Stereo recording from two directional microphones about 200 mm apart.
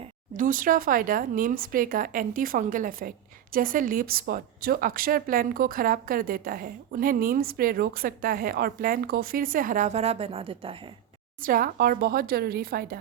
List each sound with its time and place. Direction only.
0.0 s speech: 40° right (ahead or behind)
11.3 s speech: 45° right (ahead or behind)